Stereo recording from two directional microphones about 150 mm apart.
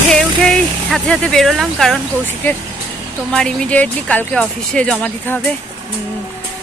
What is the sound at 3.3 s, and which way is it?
Speech, 5° left (ahead or behind).